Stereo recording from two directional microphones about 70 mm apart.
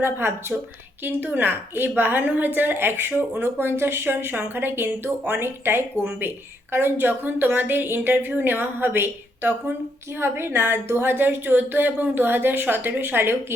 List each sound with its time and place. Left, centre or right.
0.0 s a woman's voice: right